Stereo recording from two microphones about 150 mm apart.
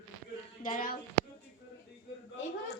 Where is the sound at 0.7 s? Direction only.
65° left (ahead or behind).